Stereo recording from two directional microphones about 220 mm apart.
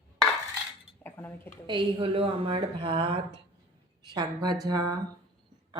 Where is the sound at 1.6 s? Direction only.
25° right (ahead or behind).